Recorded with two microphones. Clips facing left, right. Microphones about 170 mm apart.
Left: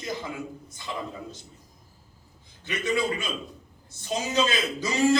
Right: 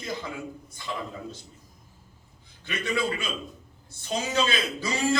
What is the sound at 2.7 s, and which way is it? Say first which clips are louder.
A man's voice: left 2 dB; 20° left (ahead or behind).